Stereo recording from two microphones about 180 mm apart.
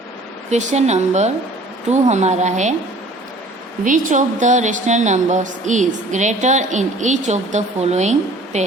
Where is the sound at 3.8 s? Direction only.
45° right (ahead or behind).